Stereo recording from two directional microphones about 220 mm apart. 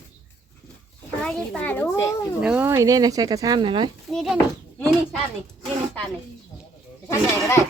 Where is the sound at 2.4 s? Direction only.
5° right (ahead or behind).